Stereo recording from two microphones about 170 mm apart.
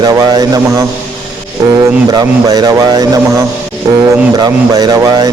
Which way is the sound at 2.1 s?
25° right (ahead or behind).